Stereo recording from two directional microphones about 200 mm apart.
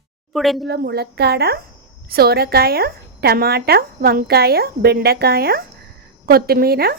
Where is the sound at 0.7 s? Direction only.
55° right (ahead or behind).